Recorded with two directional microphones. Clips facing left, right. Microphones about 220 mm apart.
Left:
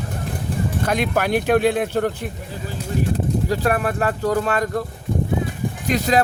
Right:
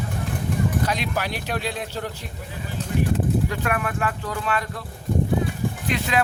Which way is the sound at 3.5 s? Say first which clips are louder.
Left 6 dB; 35° left (ahead or behind).